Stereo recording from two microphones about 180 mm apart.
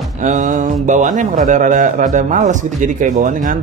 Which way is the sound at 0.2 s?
45° right (ahead or behind).